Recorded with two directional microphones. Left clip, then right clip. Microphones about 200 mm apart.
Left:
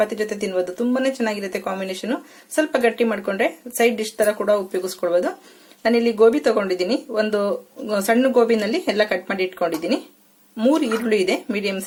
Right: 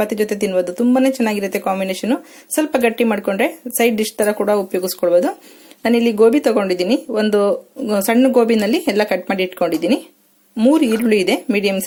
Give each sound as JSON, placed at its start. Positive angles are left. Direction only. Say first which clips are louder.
{"t": 0.0, "sound": "speech", "louder": "right 3 dB", "side_deg": -35}